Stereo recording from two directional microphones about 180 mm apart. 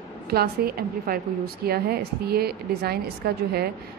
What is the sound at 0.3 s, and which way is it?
A woman's voice, 60° right (ahead or behind).